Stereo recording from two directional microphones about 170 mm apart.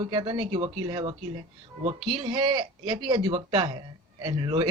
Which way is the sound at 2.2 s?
25° right (ahead or behind).